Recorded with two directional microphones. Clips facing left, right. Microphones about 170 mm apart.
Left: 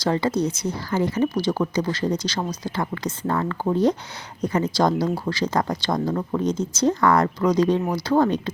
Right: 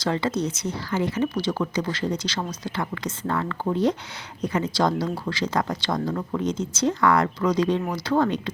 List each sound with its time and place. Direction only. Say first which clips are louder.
0.0 s speech: left 3 dB; 35° left (ahead or behind)